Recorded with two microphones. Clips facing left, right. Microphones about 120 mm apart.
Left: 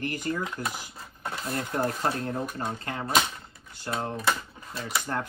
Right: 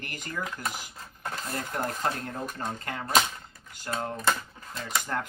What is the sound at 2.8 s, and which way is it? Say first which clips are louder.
Speech: left 2 dB; 25° left (ahead or behind).